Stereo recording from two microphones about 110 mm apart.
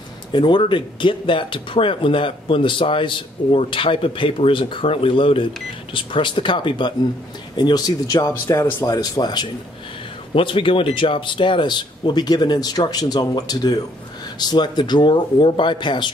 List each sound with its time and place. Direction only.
0.3 s speech: 45° left (ahead or behind)
8.5 s speech: 20° left (ahead or behind)
8.8 s speech: 35° left (ahead or behind)
10.3 s speech: 50° left (ahead or behind)